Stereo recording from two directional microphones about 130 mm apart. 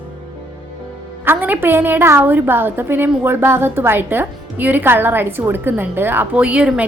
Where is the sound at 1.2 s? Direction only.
15° right (ahead or behind).